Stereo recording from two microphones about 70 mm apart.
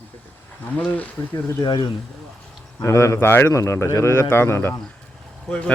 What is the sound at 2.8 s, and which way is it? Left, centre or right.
A man's voice, left.